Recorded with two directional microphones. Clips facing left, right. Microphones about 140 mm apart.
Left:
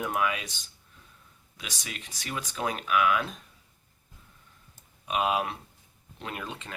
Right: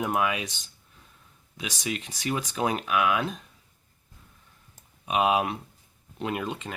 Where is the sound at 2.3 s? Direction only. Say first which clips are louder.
Right 4 dB; 20° right (ahead or behind).